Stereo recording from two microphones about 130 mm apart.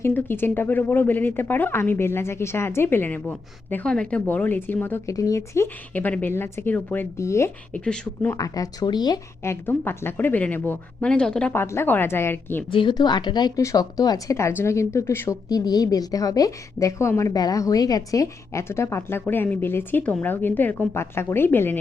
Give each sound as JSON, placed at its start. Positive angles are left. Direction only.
{"t": 0.0, "sound": "a woman's voice", "side_deg": 15}
{"t": 5.9, "sound": "speech", "side_deg": 10}
{"t": 7.7, "sound": "speech", "side_deg": 10}
{"t": 8.4, "sound": "speech", "side_deg": 25}
{"t": 9.4, "sound": "speech", "side_deg": 20}
{"t": 11.6, "sound": "a woman's voice", "side_deg": 20}
{"t": 12.7, "sound": "a woman's voice", "side_deg": 35}
{"t": 15.4, "sound": "a woman's voice", "side_deg": 30}